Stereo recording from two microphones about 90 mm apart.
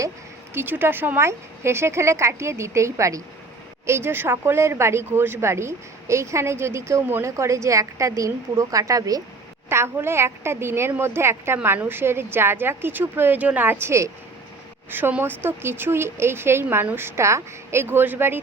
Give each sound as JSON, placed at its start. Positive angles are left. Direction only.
{"t": 0.5, "sound": "speech", "side_deg": -25}
{"t": 9.6, "sound": "a woman's voice", "side_deg": -30}